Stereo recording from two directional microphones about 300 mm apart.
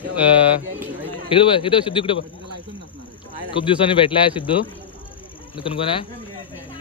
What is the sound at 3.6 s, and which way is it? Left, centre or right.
Speech, centre.